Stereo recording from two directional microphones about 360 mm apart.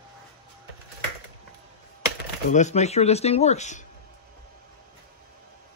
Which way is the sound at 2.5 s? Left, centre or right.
Centre.